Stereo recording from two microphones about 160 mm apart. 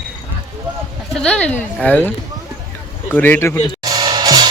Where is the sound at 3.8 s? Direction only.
25° right (ahead or behind).